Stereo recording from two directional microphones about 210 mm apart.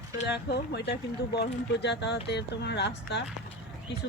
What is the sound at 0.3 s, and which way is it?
Speech, 50° left (ahead or behind).